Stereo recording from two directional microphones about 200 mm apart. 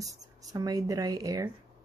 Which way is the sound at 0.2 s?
15° right (ahead or behind).